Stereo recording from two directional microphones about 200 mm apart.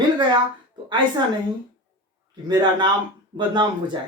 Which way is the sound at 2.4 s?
20° right (ahead or behind).